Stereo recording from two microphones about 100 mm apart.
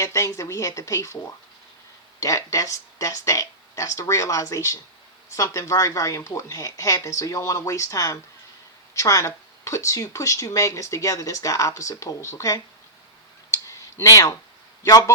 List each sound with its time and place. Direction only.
0.0 s speech: 30° left (ahead or behind)
13.5 s a sound: 30° left (ahead or behind)
14.8 s speech: 35° left (ahead or behind)